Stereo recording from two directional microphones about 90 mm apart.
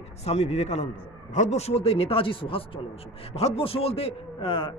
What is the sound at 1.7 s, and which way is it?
A man's voice, 90° left.